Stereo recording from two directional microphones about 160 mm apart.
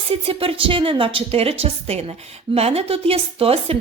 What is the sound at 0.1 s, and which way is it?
A woman's voice, 35° right (ahead or behind).